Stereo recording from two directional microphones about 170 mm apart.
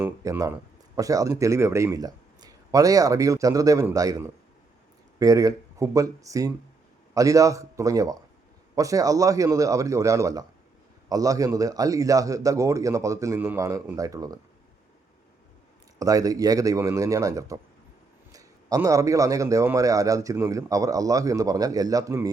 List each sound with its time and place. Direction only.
0.0 s a man's voice: 20° right (ahead or behind)
16.0 s a man's voice: 20° right (ahead or behind)